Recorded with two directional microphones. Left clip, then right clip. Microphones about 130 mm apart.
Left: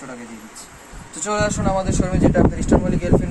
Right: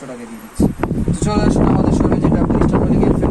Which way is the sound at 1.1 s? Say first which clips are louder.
Right 1 dB; centre (ahead or behind).